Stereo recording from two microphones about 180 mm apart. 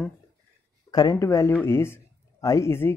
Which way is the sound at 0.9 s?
20° left (ahead or behind).